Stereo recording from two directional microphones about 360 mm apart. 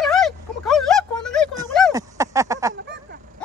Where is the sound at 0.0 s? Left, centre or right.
Centre.